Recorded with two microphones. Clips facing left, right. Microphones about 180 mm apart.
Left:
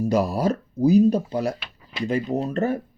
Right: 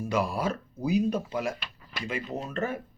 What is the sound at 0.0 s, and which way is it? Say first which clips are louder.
Speech: left 7 dB; 40° left (ahead or behind).